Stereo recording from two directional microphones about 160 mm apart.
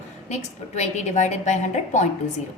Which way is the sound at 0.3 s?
45° left (ahead or behind).